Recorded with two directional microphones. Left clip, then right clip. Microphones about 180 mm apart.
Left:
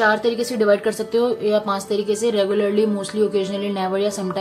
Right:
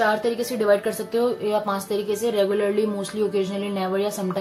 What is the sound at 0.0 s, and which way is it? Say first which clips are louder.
A woman's voice: left 3 dB; 25° left (ahead or behind).